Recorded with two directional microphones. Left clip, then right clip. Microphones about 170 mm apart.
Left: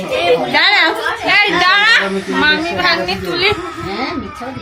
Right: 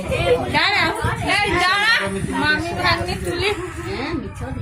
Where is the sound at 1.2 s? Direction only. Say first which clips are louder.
Left 7 dB; 25° right (ahead or behind); by 3.5 s 5° right (ahead or behind).